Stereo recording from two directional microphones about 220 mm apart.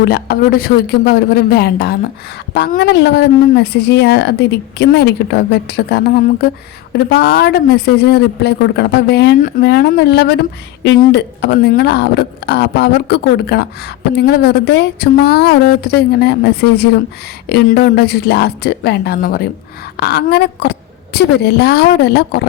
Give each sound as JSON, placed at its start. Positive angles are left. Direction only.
{"t": 0.0, "sound": "a woman's voice", "side_deg": 45}